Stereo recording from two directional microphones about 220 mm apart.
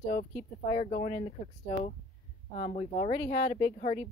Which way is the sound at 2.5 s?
30° left (ahead or behind).